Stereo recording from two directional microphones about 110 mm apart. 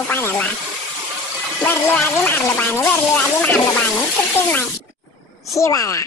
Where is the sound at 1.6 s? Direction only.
15° left (ahead or behind).